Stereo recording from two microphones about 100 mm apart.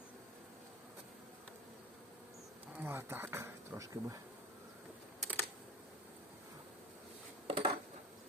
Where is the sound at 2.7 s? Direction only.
20° right (ahead or behind).